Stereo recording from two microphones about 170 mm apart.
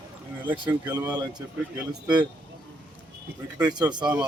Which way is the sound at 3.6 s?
25° right (ahead or behind).